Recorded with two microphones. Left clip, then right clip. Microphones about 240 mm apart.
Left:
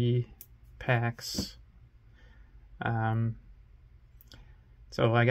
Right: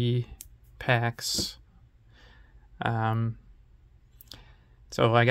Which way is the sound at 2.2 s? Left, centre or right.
Centre.